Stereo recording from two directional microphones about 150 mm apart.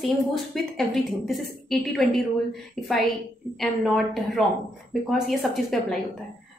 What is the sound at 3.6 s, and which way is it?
Speech, centre (ahead or behind).